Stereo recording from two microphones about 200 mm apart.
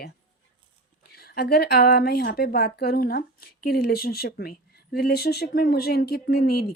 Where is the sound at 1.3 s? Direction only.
50° left (ahead or behind).